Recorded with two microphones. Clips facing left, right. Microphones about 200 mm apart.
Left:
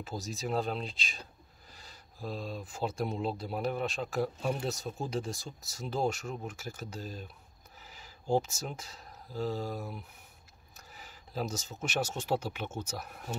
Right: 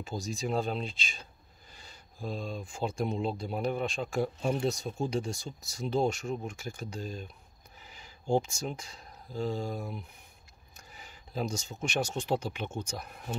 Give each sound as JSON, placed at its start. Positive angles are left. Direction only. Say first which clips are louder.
{"t": 0.0, "sound": "speech", "louder": "right 3 dB", "side_deg": 0}